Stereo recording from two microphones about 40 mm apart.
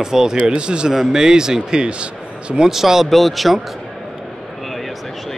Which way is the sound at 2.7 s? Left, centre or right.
Centre.